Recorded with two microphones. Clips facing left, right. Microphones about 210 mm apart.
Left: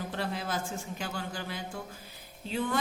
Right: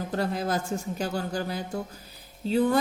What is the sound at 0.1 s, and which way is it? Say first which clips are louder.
Speech: right 9 dB; 40° right (ahead or behind).